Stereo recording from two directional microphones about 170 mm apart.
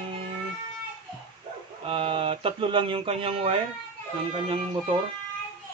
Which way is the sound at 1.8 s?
35° right (ahead or behind).